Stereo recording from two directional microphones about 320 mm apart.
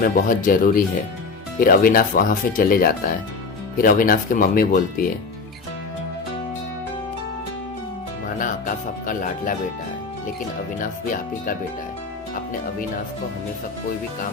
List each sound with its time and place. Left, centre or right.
0.0 s speech: left
8.4 s speech: left
10.8 s speech: left